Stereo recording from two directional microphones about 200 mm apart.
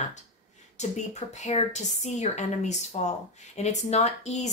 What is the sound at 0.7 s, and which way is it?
Speech, 35° left (ahead or behind).